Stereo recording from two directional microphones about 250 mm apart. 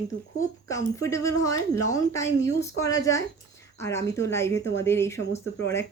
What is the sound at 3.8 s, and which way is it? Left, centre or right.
Speech, centre.